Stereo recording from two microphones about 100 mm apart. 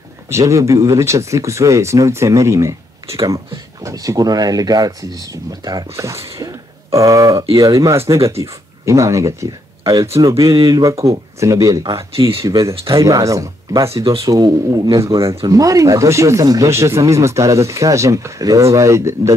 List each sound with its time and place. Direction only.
0.3 s speech: 30° right (ahead or behind)